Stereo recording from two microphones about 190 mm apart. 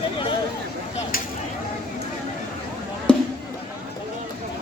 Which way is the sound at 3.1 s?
5° left (ahead or behind).